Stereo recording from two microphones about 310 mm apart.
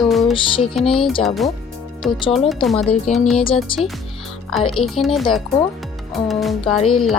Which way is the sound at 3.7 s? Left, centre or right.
Centre.